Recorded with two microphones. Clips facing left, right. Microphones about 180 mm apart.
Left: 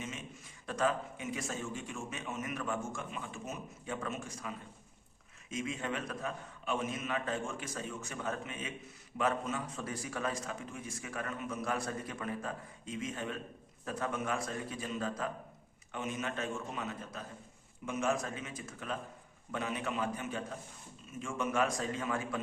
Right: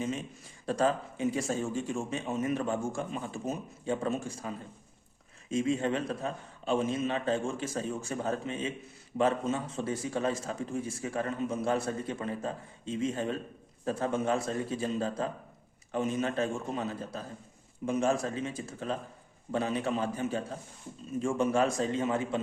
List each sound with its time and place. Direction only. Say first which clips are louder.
0.0 s a man's voice: right 9 dB; 35° right (ahead or behind)